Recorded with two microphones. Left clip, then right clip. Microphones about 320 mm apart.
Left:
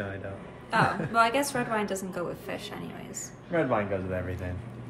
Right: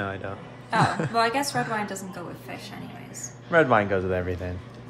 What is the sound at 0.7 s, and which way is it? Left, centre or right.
A woman's voice, centre.